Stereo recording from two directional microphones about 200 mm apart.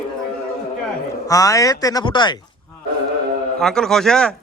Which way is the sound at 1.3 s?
15° left (ahead or behind).